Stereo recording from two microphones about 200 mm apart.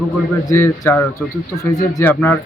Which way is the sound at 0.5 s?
10° left (ahead or behind).